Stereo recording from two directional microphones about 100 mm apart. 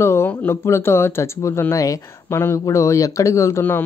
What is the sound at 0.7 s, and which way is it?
Speech, 25° left (ahead or behind).